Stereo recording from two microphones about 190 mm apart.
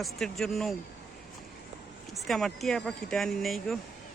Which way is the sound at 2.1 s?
Centre (ahead or behind).